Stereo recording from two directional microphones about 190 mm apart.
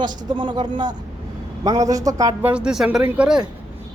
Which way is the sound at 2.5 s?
5° right (ahead or behind).